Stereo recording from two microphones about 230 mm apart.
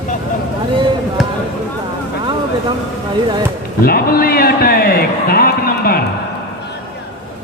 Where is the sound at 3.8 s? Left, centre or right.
Left.